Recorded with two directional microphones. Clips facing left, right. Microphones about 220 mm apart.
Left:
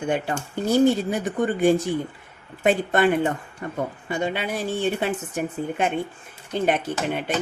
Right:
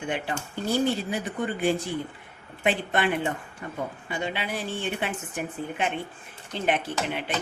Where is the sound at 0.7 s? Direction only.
45° left (ahead or behind).